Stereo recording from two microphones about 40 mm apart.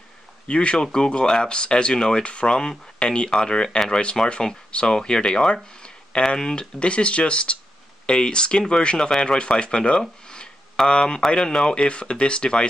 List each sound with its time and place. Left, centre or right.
0.5 s speech: left